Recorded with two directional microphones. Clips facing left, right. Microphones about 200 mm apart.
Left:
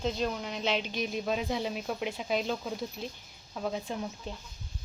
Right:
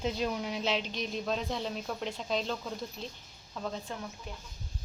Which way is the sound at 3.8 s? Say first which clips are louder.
Left 5 dB; 25° left (ahead or behind).